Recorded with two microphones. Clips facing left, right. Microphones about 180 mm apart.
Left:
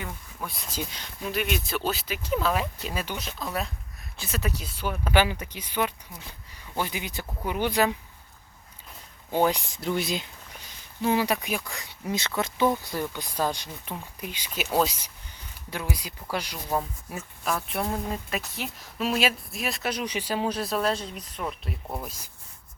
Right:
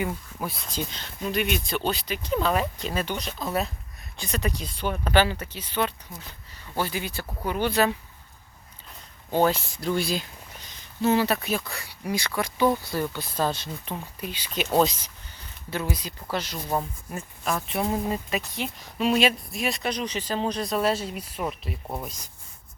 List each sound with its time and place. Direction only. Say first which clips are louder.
0.4 s speech: right 3 dB; centre (ahead or behind)
9.3 s speech: right 1 dB; 15° left (ahead or behind)
16.6 s speech: right 1 dB; centre (ahead or behind)